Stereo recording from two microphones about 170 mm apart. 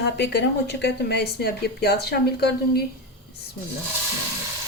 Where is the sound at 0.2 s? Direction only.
80° left.